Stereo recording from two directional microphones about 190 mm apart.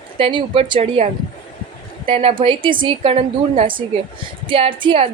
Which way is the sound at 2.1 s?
30° right (ahead or behind).